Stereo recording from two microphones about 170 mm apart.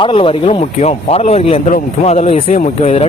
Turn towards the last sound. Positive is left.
turn(degrees=40)  # may be behind; listen again after turning